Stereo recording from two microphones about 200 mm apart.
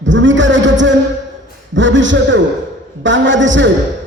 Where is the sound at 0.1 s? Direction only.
65° right (ahead or behind).